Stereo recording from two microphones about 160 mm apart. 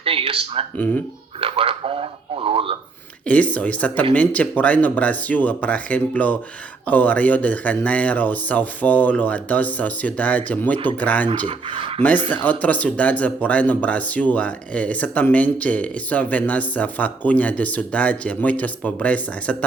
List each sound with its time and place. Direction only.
0.0 s speech: 35° right (ahead or behind)
3.2 s speech: 10° left (ahead or behind)
11.4 s speech: 30° right (ahead or behind)
11.9 s speech: 10° left (ahead or behind)